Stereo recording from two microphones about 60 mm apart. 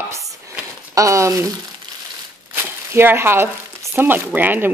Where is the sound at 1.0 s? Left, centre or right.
Right.